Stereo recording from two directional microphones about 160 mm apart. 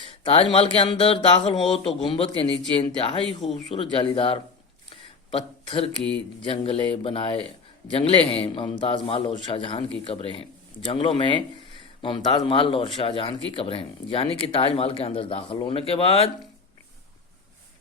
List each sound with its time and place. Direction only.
0.0 s a man's voice: 35° left (ahead or behind)
3.2 s speech: centre (ahead or behind)
3.7 s a man's voice: 35° left (ahead or behind)